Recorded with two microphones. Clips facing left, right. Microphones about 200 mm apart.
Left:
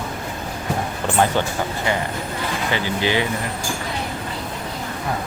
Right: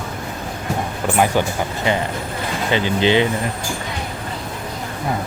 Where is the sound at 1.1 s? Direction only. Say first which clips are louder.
Right 2 dB; 10° right (ahead or behind).